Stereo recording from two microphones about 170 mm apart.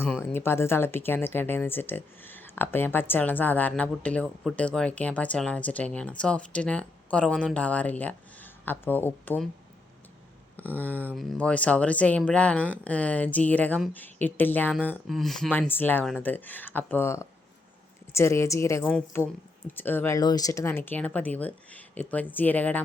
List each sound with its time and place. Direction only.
0.0 s a sound: 10° left (ahead or behind)
0.3 s speech: 15° left (ahead or behind)
10.8 s speech: 10° left (ahead or behind)